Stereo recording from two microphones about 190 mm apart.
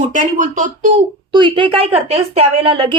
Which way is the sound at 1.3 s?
25° right (ahead or behind).